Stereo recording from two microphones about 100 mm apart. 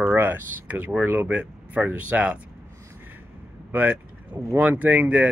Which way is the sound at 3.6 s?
20° right (ahead or behind).